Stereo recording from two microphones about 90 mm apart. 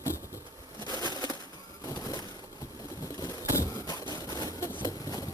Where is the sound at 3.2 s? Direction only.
40° left (ahead or behind).